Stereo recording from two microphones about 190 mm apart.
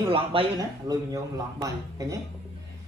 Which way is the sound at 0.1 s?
30° right (ahead or behind).